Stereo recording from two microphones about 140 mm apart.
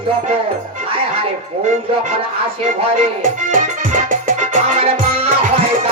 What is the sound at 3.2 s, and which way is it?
Music, 75° right (ahead or behind).